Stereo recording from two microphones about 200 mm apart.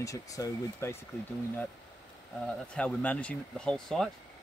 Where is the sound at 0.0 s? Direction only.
15° left (ahead or behind).